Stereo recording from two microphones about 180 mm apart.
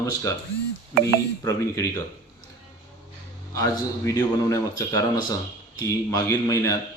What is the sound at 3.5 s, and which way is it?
A man's voice, 20° left (ahead or behind).